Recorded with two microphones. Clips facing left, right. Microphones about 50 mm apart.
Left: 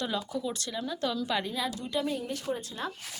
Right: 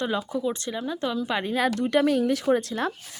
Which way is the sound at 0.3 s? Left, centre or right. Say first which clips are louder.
Right 6 dB; right.